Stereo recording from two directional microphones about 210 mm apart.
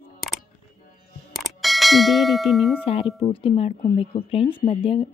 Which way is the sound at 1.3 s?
Centre (ahead or behind).